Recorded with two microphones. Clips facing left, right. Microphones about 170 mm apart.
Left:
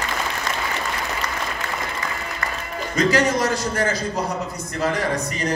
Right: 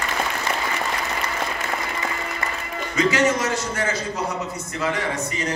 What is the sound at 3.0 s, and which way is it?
Speech, 35° left (ahead or behind).